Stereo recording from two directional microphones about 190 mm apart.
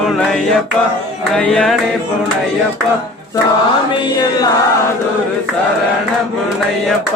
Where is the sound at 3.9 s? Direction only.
20° left (ahead or behind).